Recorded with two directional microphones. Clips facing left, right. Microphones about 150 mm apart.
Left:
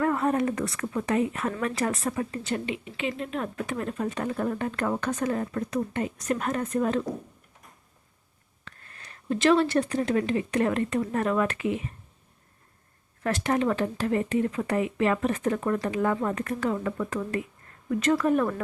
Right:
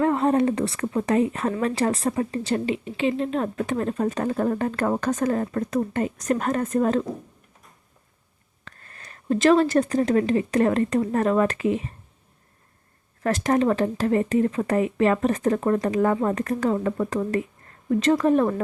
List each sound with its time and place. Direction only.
0.0 s speech: 25° right (ahead or behind); by 7.0 s 45° right (ahead or behind)
8.6 s speech: 40° right (ahead or behind)
13.2 s speech: 40° right (ahead or behind)